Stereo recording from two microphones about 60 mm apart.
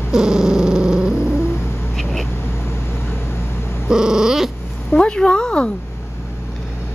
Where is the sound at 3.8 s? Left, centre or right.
Centre.